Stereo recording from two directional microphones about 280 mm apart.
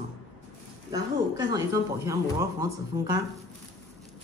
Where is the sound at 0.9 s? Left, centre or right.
Centre.